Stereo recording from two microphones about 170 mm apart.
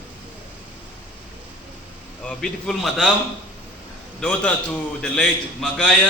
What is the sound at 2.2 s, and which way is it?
Speech, 5° left (ahead or behind).